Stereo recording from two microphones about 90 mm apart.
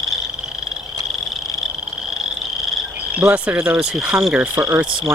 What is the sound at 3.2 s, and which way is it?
Frog, 15° right (ahead or behind).